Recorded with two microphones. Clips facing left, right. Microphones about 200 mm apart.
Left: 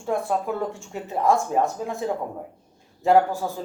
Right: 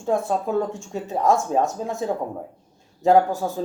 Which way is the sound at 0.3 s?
15° right (ahead or behind).